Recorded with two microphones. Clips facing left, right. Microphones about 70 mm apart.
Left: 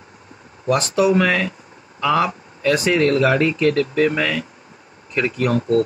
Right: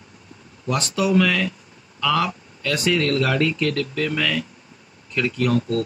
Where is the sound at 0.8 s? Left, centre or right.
Left.